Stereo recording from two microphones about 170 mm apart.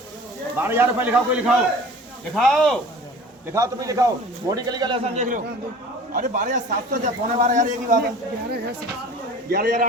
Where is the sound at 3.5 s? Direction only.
20° right (ahead or behind).